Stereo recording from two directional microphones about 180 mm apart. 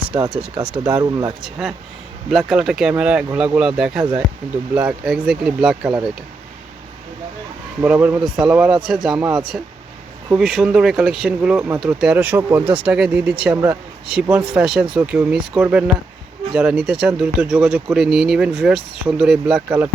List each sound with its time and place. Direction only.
0.1 s speech: 35° right (ahead or behind)
0.6 s speech: 10° right (ahead or behind)
1.0 s speech: 20° right (ahead or behind)
1.4 s speech: centre (ahead or behind)
7.8 s speech: 10° right (ahead or behind)
16.5 s speech: 5° right (ahead or behind)